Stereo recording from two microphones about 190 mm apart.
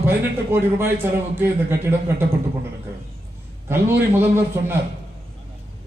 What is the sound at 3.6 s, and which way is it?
A man's voice, 10° right (ahead or behind).